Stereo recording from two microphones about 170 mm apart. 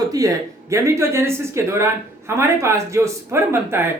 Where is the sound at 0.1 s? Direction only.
20° right (ahead or behind).